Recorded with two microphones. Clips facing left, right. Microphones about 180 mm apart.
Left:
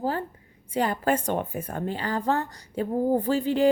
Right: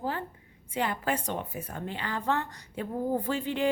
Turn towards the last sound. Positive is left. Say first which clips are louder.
# left 6 dB
turn(degrees=35)  # may be behind; listen again after turning